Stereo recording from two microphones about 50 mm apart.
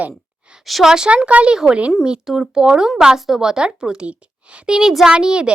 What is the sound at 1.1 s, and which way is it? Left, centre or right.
Speech, right.